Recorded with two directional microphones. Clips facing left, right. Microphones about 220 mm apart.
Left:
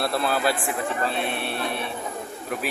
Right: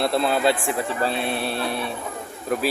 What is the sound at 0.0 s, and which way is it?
Speech, 20° right (ahead or behind).